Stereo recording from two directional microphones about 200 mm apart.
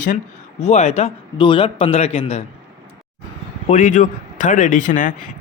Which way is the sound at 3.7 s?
40° left (ahead or behind).